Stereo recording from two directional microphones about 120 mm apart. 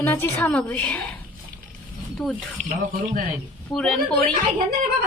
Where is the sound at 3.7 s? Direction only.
5° left (ahead or behind).